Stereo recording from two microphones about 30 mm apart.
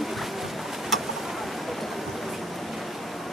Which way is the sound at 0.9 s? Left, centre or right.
Centre.